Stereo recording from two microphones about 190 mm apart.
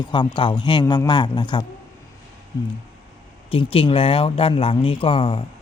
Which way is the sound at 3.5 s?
30° left (ahead or behind).